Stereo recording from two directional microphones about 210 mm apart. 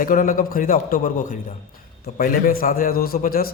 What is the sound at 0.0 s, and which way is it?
A man's voice, 40° left (ahead or behind).